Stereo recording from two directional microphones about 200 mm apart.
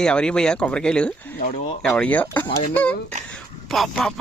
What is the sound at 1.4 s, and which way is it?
Speech, 35° left (ahead or behind).